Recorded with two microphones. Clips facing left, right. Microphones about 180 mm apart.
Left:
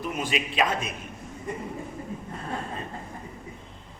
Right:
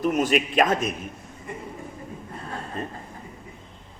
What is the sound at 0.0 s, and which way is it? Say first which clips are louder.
Speech: right 8 dB; 45° right (ahead or behind).